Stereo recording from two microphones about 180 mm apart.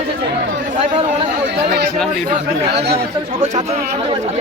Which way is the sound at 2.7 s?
60° right (ahead or behind).